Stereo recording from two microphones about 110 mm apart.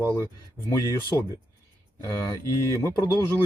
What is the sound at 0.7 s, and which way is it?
Speech, 30° left (ahead or behind).